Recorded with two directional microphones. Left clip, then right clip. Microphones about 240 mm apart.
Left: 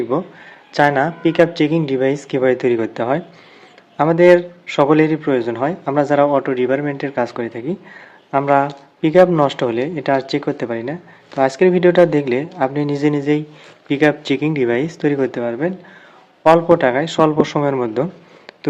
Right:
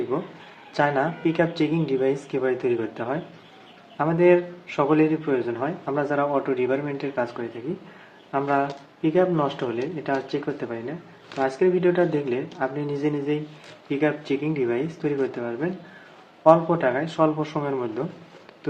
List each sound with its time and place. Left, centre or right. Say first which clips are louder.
0.1 s a man's voice: left 8 dB; left